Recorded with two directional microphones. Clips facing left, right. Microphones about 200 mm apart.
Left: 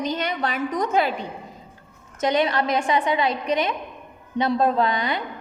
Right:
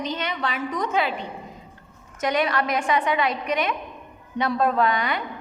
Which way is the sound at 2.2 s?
25° left (ahead or behind).